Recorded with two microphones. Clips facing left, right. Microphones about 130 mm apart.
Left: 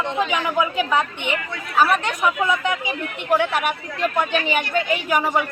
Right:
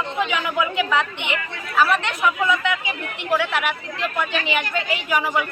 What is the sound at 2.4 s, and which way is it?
Speech, 35° left (ahead or behind).